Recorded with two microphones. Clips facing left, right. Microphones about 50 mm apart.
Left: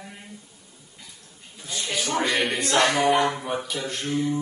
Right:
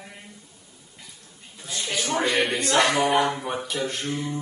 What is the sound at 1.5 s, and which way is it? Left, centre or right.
A woman's voice, centre.